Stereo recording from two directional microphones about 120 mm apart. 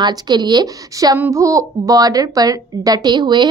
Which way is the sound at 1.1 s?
20° right (ahead or behind).